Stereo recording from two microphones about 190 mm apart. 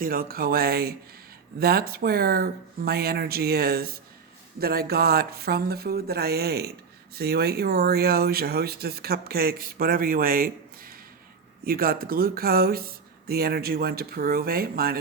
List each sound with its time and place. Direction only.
0.0 s speech: 50° right (ahead or behind)